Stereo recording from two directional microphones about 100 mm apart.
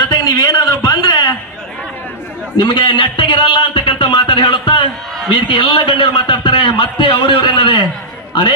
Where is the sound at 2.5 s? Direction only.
55° left (ahead or behind).